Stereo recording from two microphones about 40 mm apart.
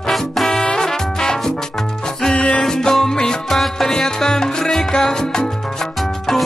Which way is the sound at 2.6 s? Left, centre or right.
Centre.